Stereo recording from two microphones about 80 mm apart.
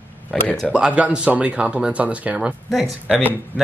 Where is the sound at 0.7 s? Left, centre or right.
Centre.